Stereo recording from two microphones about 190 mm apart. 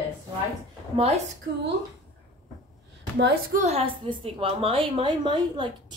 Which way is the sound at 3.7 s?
30° right (ahead or behind).